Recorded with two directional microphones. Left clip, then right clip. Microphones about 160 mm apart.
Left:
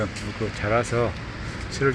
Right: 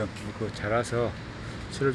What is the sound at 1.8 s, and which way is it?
Speech, 20° right (ahead or behind).